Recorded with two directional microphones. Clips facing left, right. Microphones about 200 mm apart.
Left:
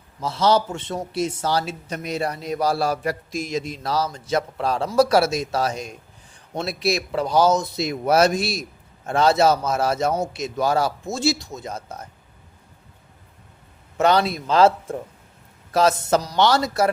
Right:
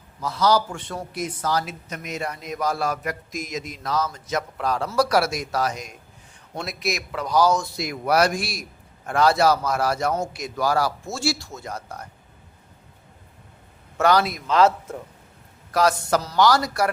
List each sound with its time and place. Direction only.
0.2 s a man's voice: 25° left (ahead or behind)
14.0 s a man's voice: 25° left (ahead or behind)